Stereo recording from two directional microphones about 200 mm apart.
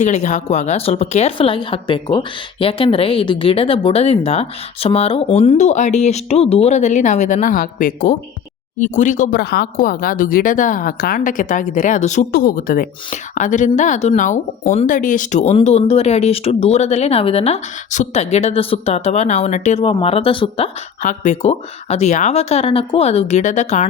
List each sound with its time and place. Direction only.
0.0 s speech: 35° left (ahead or behind)
12.3 s speech: 50° left (ahead or behind); by 20.7 s 25° left (ahead or behind)
21.0 s speech: 40° left (ahead or behind)